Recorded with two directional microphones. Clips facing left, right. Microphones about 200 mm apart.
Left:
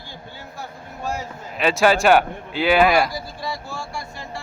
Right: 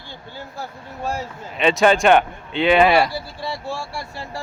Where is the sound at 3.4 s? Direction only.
30° right (ahead or behind).